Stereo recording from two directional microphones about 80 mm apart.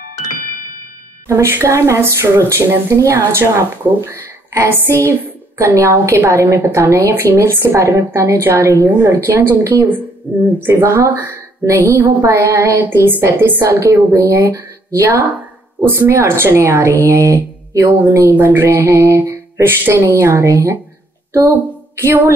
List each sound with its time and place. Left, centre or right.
1.2 s speech: right
9.6 s a woman's voice: right